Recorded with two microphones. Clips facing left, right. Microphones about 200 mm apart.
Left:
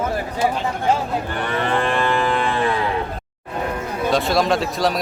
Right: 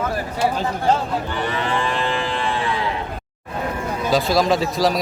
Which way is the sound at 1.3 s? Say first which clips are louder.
Left 3 dB; 55° left (ahead or behind).